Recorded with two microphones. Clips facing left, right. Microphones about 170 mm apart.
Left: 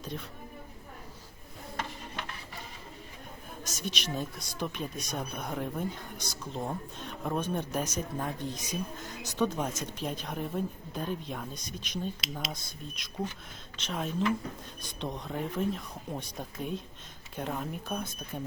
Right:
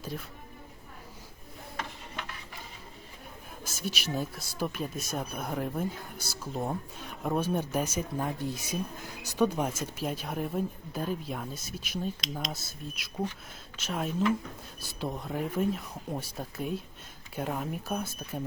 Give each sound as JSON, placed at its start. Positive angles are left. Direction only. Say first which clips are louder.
{"t": 3.6, "sound": "speech", "louder": "right 1 dB", "side_deg": -5}